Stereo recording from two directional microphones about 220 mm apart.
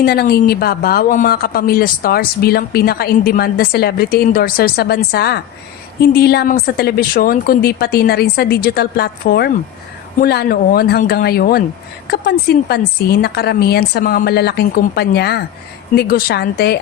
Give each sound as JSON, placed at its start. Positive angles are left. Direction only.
{"t": 0.0, "sound": "speech", "side_deg": 45}